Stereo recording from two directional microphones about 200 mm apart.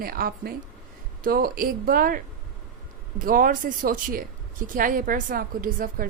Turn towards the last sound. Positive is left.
turn(degrees=-45)  # may be behind; listen again after turning